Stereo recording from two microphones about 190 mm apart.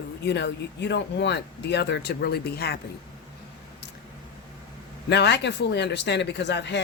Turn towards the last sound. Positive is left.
turn(degrees=65)  # may be behind; listen again after turning